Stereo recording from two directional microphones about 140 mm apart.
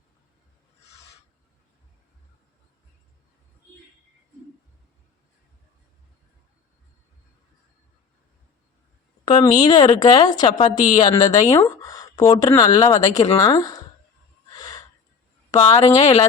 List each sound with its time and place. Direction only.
9.2 s a woman's voice: 30° left (ahead or behind)
14.6 s a sound: 30° left (ahead or behind)
15.5 s speech: 30° left (ahead or behind)